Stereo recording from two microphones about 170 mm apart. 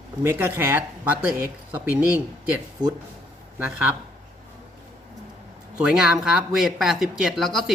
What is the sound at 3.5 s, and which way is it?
Speech, 10° right (ahead or behind).